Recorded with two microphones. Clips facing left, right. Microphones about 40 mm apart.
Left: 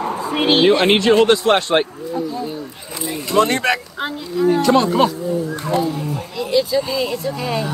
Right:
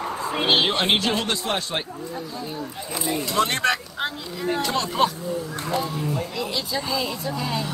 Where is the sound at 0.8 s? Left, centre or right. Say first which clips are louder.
Left 10 dB; left.